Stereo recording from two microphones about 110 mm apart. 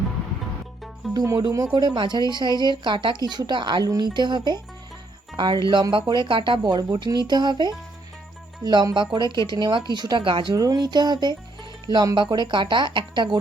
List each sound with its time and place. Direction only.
1.1 s speech: 30° right (ahead or behind)
1.4 s speech: 45° right (ahead or behind)
10.5 s speech: 35° right (ahead or behind)